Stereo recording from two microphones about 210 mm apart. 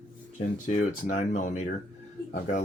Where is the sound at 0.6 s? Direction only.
35° left (ahead or behind).